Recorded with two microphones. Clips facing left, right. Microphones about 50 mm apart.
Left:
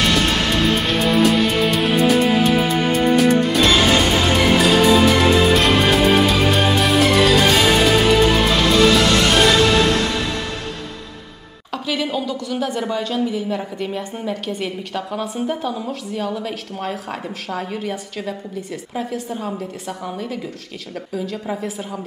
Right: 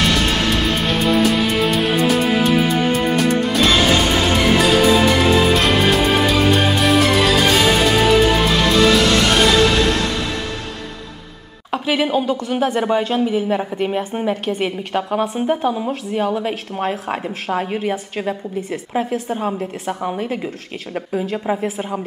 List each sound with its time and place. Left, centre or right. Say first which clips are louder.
0.0 s music: even; centre
11.7 s a woman's voice: right 5 dB; right